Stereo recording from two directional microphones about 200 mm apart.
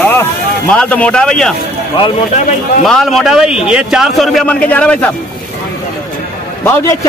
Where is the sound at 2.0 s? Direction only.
25° left (ahead or behind).